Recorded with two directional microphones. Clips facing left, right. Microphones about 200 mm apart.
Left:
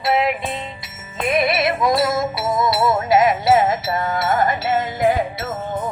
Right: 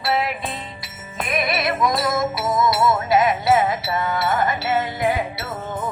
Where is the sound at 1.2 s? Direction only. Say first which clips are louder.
Left 5 dB; 25° left (ahead or behind); by 4.3 s 45° left (ahead or behind).